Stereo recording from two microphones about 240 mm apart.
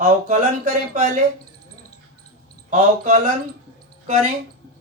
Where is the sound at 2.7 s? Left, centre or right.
Right.